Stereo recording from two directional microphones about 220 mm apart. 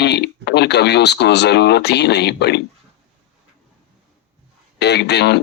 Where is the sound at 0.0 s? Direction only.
50° left (ahead or behind).